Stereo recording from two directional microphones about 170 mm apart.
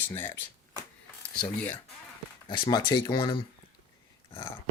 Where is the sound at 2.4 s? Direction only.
30° left (ahead or behind).